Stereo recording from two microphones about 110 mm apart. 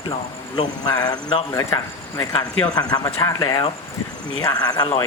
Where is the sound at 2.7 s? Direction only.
40° left (ahead or behind).